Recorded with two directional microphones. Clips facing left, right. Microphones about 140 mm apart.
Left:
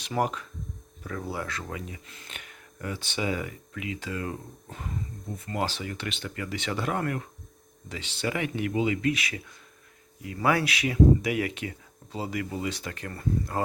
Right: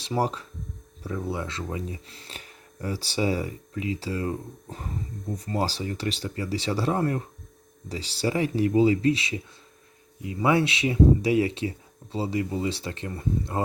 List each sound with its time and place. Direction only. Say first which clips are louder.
0.0 s speech: right 2 dB; 30° right (ahead or behind)